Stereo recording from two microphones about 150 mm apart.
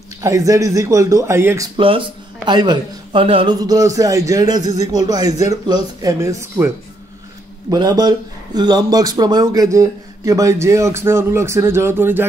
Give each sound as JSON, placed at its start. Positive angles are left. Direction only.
{"t": 0.2, "sound": "speech", "side_deg": -20}
{"t": 1.8, "sound": "a man's voice", "side_deg": -35}
{"t": 3.5, "sound": "speech", "side_deg": -25}
{"t": 7.7, "sound": "speech", "side_deg": -25}